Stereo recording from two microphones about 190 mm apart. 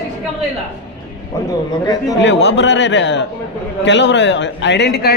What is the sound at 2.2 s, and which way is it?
A man's voice, 70° left (ahead or behind).